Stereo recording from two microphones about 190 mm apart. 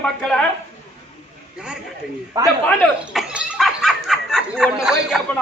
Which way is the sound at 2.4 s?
15° right (ahead or behind).